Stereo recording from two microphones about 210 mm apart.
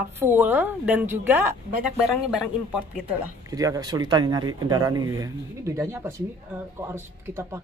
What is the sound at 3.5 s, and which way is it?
Speech, 15° right (ahead or behind).